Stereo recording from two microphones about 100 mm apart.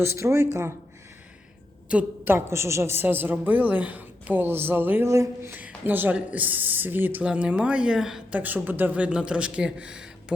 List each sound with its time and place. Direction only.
0.0 s a woman's voice: 30° right (ahead or behind)
1.9 s a woman's voice: 15° right (ahead or behind)
5.0 s speech: 30° right (ahead or behind); by 8.4 s 5° right (ahead or behind)
8.4 s speech: 20° right (ahead or behind)